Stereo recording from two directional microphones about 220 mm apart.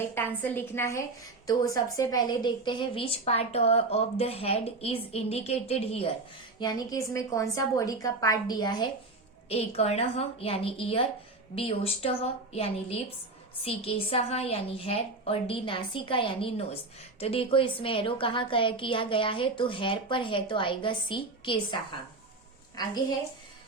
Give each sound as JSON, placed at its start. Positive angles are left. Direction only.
{"t": 0.1, "sound": "a woman's voice", "side_deg": 10}